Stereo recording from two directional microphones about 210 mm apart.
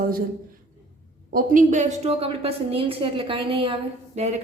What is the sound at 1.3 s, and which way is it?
A woman's voice, 40° right (ahead or behind).